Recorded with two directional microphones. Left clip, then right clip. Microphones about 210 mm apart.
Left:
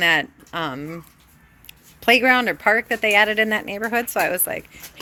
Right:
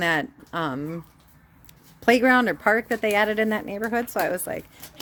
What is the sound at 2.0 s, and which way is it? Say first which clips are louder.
Speech: left 3 dB; 20° right (ahead or behind).